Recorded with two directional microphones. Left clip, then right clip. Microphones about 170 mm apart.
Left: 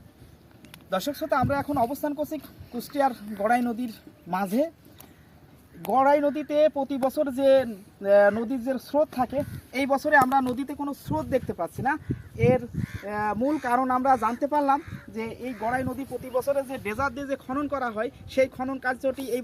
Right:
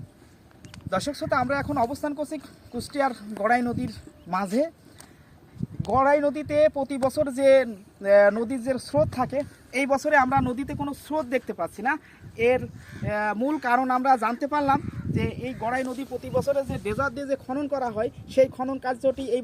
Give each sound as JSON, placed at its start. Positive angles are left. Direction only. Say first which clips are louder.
{"t": 1.2, "sound": "speech", "louder": "even", "side_deg": 0}
{"t": 5.8, "sound": "speech", "louder": "even", "side_deg": -5}